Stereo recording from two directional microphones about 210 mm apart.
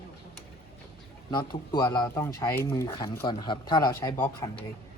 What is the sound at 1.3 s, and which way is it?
Speech, 20° left (ahead or behind).